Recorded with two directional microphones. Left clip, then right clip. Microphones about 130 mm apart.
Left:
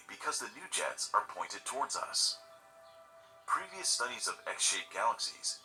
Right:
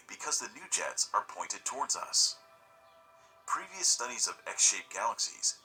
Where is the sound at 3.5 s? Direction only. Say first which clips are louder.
Right 2 dB; 30° right (ahead or behind).